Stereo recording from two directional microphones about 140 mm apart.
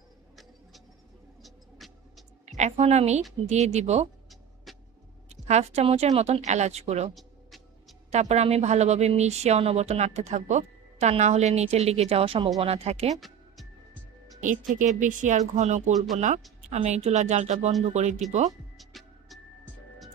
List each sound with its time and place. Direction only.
1.4 s music: centre (ahead or behind)
2.4 s a woman's voice: 55° right (ahead or behind)
4.7 s vehicle: centre (ahead or behind)
5.3 s speech: 50° right (ahead or behind)
8.1 s speech: 50° right (ahead or behind)
13.1 s music: centre (ahead or behind)
15.0 s speech: 65° right (ahead or behind)
18.8 s music: centre (ahead or behind)